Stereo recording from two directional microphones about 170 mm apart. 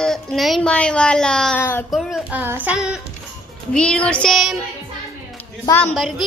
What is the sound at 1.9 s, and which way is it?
A child's voice, centre (ahead or behind).